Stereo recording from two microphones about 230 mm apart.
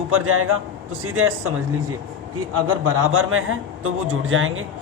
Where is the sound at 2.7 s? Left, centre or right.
Right.